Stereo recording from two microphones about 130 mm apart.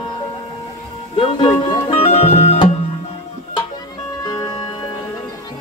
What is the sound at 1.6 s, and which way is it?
Music, 55° left (ahead or behind).